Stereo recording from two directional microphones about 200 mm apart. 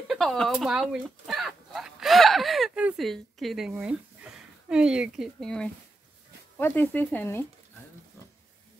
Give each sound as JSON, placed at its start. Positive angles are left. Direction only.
{"t": 0.1, "sound": "speech", "side_deg": 0}